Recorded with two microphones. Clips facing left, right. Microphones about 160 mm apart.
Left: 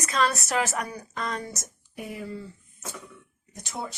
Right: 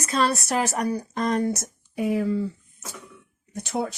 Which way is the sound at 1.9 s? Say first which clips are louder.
Right 12 dB; 90° right.